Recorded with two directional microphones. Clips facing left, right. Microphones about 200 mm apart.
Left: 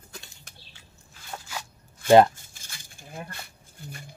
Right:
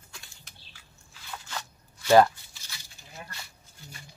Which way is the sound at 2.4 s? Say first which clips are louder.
Left 1 dB; 50° left (ahead or behind).